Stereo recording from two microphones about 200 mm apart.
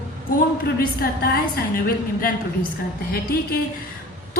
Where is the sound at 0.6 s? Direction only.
50° left (ahead or behind).